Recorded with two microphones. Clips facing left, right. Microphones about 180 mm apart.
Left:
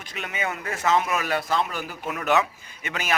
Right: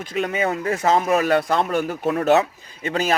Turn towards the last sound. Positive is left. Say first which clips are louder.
# right 9 dB
turn(degrees=-35)  # may be behind; listen again after turning